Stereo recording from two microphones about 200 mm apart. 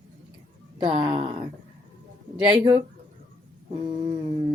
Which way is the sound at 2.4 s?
25° right (ahead or behind).